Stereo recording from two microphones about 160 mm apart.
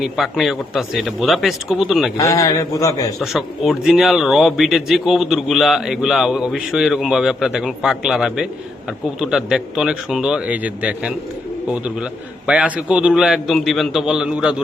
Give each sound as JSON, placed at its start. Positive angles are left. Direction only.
{"t": 0.0, "sound": "speech", "side_deg": 0}
{"t": 2.1, "sound": "a man's voice", "side_deg": 20}
{"t": 3.2, "sound": "speech", "side_deg": 0}